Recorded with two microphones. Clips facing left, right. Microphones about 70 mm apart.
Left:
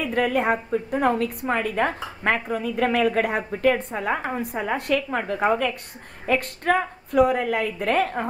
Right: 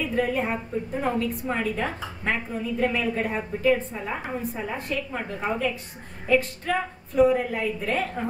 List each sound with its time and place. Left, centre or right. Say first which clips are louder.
0.0 s a woman's voice: left 3 dB; left
6.2 s a woman's voice: left 1 dB; left